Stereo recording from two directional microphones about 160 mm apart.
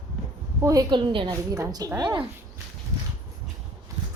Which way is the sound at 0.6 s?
20° right (ahead or behind).